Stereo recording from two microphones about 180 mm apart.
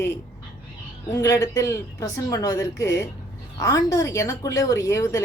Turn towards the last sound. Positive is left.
turn(degrees=15)  # may be behind; listen again after turning